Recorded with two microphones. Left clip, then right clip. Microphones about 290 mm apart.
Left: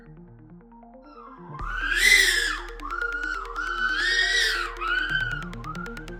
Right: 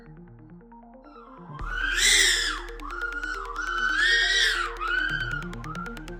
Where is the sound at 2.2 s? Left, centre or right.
Centre.